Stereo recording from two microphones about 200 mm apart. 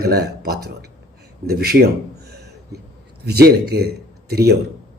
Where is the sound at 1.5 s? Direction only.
50° right (ahead or behind).